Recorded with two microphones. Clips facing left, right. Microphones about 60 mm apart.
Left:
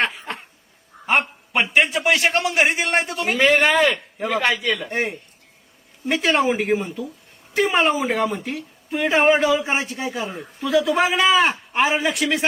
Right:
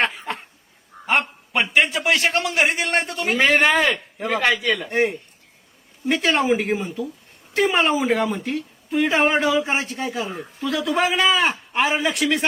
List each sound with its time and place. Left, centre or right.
1.0 s a sound: centre
1.7 s a woman's voice: centre
3.5 s speech: centre
4.2 s a woman's voice: centre